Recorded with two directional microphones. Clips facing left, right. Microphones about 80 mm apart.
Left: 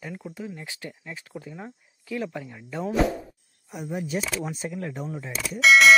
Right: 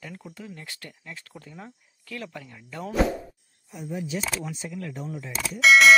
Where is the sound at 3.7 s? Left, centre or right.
Left.